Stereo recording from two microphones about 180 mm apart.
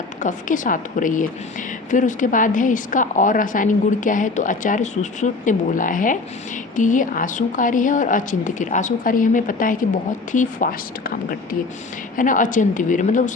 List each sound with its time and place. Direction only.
0.2 s a woman's voice: 45° left (ahead or behind)